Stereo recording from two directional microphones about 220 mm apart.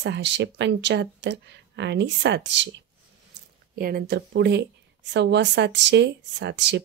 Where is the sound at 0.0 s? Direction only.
55° right (ahead or behind).